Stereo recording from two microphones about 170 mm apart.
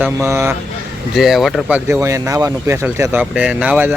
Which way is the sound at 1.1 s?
Centre (ahead or behind).